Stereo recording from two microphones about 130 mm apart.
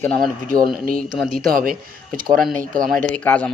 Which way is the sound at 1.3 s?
90° right.